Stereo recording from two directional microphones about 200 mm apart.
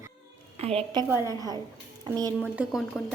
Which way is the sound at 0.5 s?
30° right (ahead or behind).